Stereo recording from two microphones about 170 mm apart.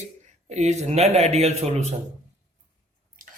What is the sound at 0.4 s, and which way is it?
A man's voice, 45° right (ahead or behind).